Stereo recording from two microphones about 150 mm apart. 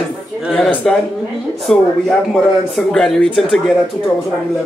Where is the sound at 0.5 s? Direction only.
5° left (ahead or behind).